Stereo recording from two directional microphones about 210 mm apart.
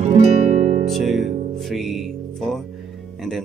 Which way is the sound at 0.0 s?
30° right (ahead or behind).